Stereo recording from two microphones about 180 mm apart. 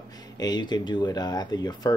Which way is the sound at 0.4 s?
25° left (ahead or behind).